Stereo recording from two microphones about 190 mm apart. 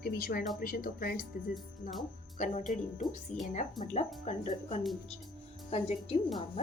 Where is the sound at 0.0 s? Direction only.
50° left (ahead or behind).